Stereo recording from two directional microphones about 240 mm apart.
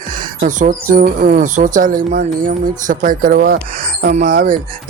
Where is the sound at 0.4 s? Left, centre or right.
Right.